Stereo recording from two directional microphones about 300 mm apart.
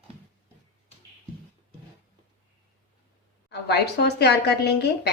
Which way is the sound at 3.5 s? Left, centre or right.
Left.